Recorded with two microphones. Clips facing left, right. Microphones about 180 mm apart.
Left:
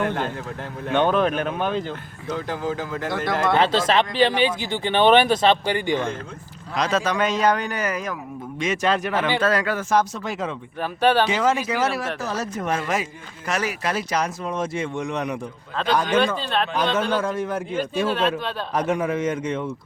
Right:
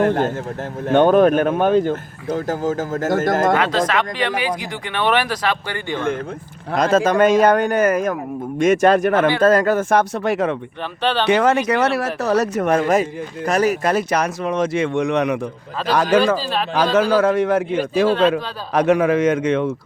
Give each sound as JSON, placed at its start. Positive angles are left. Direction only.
{"t": 0.0, "sound": "speech", "side_deg": -40}
{"t": 3.6, "sound": "speech", "side_deg": 30}
{"t": 6.7, "sound": "speech", "side_deg": -50}
{"t": 11.0, "sound": "speech", "side_deg": 10}
{"t": 11.3, "sound": "speech", "side_deg": -65}
{"t": 12.9, "sound": "speech", "side_deg": -40}
{"t": 16.4, "sound": "speech", "side_deg": 0}
{"t": 16.7, "sound": "a man's voice", "side_deg": -90}